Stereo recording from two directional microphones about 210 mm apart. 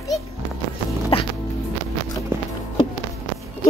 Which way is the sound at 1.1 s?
25° left (ahead or behind).